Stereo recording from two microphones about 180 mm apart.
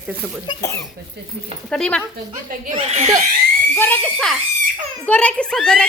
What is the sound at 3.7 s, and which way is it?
A woman's voice, 10° left (ahead or behind).